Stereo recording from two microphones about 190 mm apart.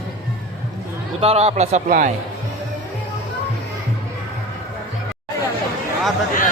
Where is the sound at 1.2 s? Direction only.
30° right (ahead or behind).